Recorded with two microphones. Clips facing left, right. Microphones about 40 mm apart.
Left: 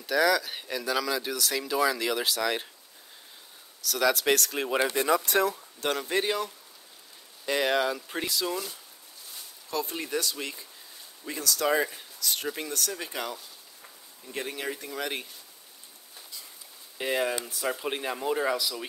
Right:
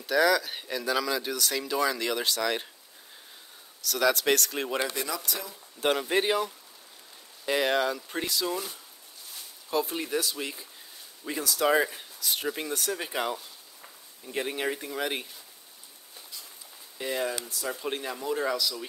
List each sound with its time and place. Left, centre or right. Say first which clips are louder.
0.0 s speech: right 1 dB; centre
3.8 s speech: even; centre
4.7 s speech: left 5 dB; left
5.0 s speech: left 9 dB; left
5.3 s speech: left 12 dB; left
5.8 s speech: right 4 dB; centre
9.8 s speech: right 1 dB; centre
14.9 s speech: right 2 dB; centre
17.0 s speech: left 2 dB; left